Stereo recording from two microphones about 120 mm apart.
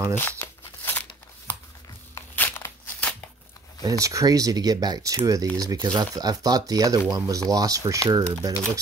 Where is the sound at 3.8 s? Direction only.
25° right (ahead or behind).